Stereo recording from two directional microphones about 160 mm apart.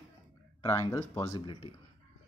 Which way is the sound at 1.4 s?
30° left (ahead or behind).